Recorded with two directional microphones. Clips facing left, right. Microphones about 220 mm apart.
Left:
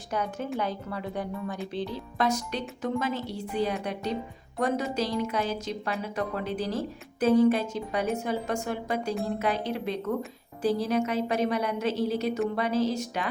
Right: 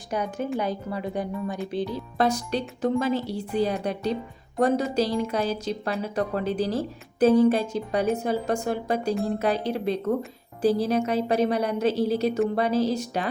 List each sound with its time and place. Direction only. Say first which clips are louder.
0.1 s speech: right 3 dB; 15° right (ahead or behind)
2.1 s speech: right 4 dB; 35° right (ahead or behind)